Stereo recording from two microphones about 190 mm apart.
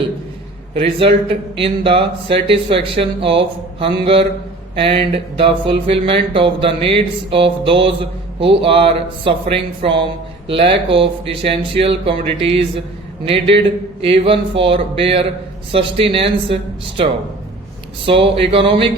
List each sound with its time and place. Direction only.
0.7 s speech: 30° right (ahead or behind)
18.0 s speech: 30° right (ahead or behind)